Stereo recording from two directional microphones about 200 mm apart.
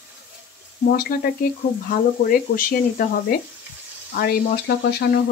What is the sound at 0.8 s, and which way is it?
Speech, 50° left (ahead or behind).